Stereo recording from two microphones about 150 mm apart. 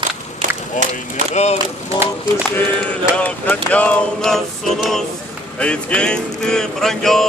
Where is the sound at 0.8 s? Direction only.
55° left (ahead or behind).